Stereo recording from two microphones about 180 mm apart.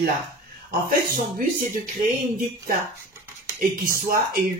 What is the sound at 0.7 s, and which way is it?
Speech, 50° right (ahead or behind).